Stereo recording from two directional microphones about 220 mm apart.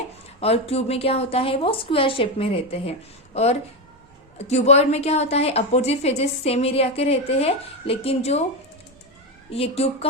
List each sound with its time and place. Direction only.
0.3 s a woman's voice: 25° left (ahead or behind)
9.5 s a woman's voice: 25° left (ahead or behind)